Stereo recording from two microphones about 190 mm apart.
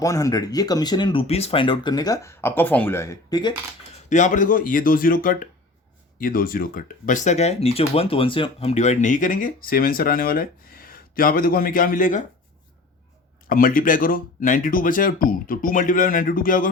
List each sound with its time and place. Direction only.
0.0 s speech: 20° left (ahead or behind)
4.1 s speech: 40° left (ahead or behind)
13.5 s speech: 45° left (ahead or behind)